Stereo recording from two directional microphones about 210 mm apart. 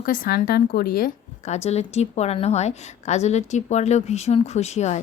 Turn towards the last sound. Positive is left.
turn(degrees=30)  # may be behind; listen again after turning